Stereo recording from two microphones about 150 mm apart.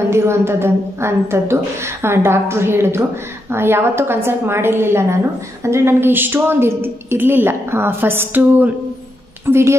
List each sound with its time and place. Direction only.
0.1 s a woman's voice: 15° right (ahead or behind)